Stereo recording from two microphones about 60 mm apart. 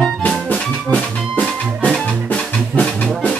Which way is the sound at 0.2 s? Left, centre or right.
Left.